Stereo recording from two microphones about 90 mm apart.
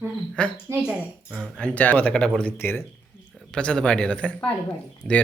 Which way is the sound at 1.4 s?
10° left (ahead or behind).